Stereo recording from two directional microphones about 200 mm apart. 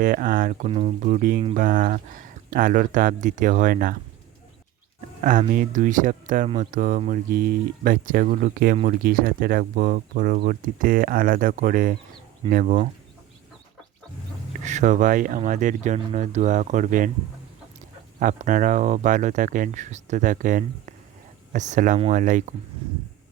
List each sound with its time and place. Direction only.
0.0 s speech: 45° right (ahead or behind)
4.9 s speech: 40° right (ahead or behind)
14.6 s speech: 35° right (ahead or behind)
18.2 s speech: 40° right (ahead or behind)